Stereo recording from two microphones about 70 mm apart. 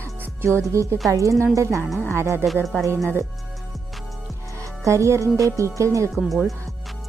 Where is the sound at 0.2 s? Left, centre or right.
Right.